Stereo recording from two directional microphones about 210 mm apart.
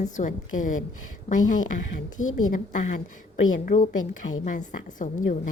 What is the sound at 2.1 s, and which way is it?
Speech, 75° left (ahead or behind).